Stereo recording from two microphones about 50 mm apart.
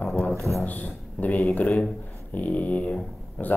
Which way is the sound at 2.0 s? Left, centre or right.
Left.